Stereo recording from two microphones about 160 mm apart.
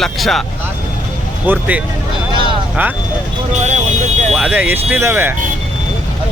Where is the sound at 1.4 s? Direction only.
10° right (ahead or behind).